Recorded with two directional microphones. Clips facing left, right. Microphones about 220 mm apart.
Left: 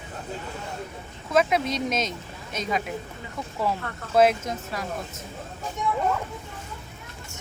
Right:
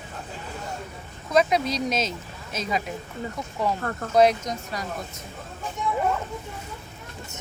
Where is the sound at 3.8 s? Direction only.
45° right (ahead or behind).